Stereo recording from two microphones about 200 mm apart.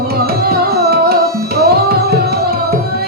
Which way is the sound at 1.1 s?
50° right (ahead or behind).